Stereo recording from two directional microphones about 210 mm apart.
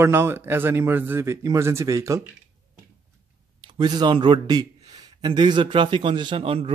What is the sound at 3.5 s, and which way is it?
Speech, 20° right (ahead or behind).